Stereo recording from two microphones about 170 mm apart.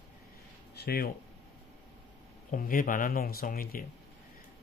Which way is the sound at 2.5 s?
55° left (ahead or behind).